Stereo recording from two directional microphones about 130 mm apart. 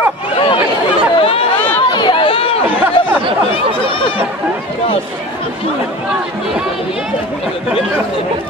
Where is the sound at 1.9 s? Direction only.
40° left (ahead or behind).